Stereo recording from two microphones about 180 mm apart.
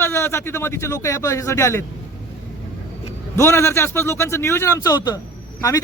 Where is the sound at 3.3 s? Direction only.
15° left (ahead or behind).